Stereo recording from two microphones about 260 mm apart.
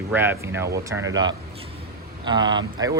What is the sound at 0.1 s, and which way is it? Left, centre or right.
Speech, centre.